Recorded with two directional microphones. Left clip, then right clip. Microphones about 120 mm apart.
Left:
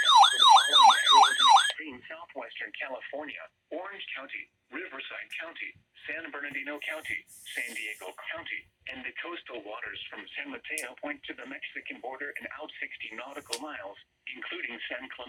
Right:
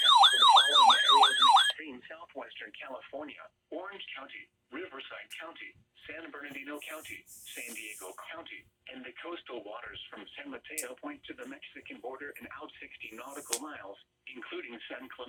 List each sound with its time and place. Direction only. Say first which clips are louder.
0.0 s emergency vehicle: left 2 dB; 25° left (ahead or behind)
1.4 s car alarm: left 2 dB; 25° left (ahead or behind)
1.7 s a sound: left 3 dB; 40° right (ahead or behind)
2.6 s radio: left 6 dB; centre (ahead or behind)
6.1 s speech: left 7 dB; 5° left (ahead or behind)